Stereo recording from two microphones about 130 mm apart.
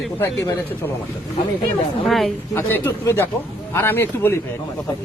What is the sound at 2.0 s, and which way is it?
Speech, centre (ahead or behind).